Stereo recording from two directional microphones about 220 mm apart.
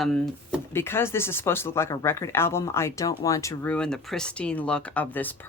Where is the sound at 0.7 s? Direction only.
10° left (ahead or behind).